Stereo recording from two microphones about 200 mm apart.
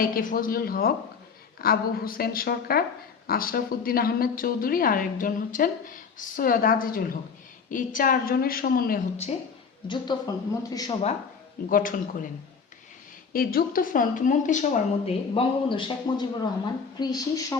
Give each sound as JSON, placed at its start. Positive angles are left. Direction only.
{"t": 0.0, "sound": "a woman's voice", "side_deg": 45}
{"t": 9.8, "sound": "a man's voice", "side_deg": 20}
{"t": 11.7, "sound": "a woman's voice", "side_deg": 40}
{"t": 13.3, "sound": "a man's voice", "side_deg": 50}